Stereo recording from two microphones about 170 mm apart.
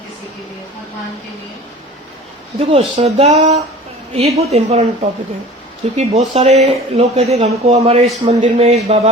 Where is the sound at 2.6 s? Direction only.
40° right (ahead or behind).